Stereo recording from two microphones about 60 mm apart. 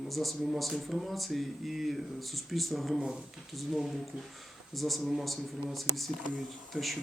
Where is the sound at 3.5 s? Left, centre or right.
Centre.